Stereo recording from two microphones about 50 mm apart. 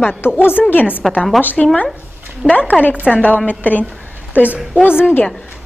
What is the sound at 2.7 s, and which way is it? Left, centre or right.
A woman's voice, left.